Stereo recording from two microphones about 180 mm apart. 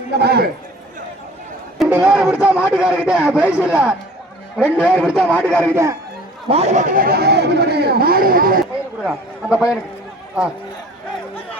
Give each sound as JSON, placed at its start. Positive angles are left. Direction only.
{"t": 0.1, "sound": "speech", "side_deg": -65}
{"t": 1.8, "sound": "speech", "side_deg": -5}
{"t": 6.5, "sound": "speech", "side_deg": -35}
{"t": 9.0, "sound": "speech", "side_deg": -5}